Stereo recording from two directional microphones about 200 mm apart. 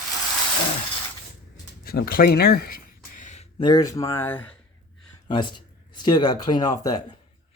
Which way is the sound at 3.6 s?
20° left (ahead or behind).